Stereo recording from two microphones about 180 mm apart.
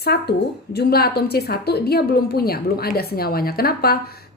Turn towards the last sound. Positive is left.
turn(degrees=60)  # may be behind; listen again after turning